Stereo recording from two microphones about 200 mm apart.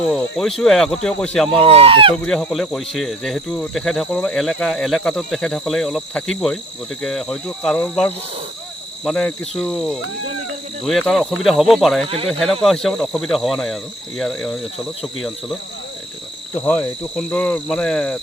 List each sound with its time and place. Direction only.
0.1 s speech: centre (ahead or behind)
1.6 s speech: 30° right (ahead or behind)
2.2 s speech: 5° left (ahead or behind)
12.0 s speech: 30° right (ahead or behind)
12.3 s speech: centre (ahead or behind)
16.6 s speech: 5° left (ahead or behind)